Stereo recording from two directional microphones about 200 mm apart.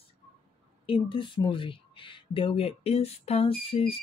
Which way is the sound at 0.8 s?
25° left (ahead or behind).